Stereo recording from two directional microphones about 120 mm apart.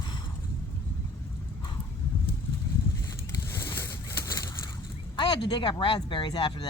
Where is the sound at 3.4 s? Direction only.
20° left (ahead or behind).